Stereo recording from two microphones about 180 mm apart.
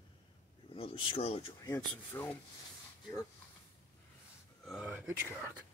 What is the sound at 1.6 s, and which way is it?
Speech, 15° left (ahead or behind).